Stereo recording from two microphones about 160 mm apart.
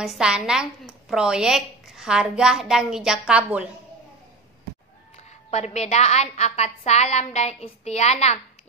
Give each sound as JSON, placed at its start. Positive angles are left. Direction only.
{"t": 0.0, "sound": "a woman's voice", "side_deg": -5}
{"t": 5.1, "sound": "a woman's voice", "side_deg": 40}